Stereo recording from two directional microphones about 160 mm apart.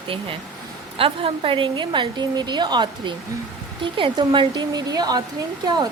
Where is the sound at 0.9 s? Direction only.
35° right (ahead or behind).